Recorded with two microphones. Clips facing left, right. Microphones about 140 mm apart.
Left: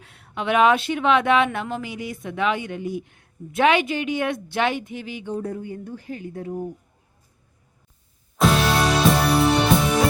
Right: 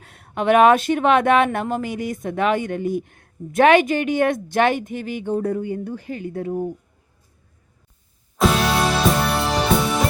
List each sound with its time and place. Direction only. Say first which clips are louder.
0.0 s speech: right 6 dB; 45° right (ahead or behind); by 6.7 s 70° right (ahead or behind)
8.4 s music: right 1 dB; centre (ahead or behind)